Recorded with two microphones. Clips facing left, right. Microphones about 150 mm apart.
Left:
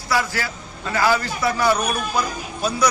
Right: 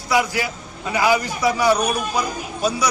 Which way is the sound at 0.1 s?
15° right (ahead or behind).